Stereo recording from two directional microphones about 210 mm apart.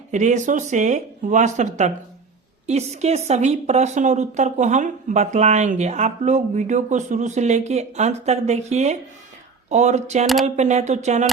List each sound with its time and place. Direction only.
0.1 s a woman's voice: 35° right (ahead or behind)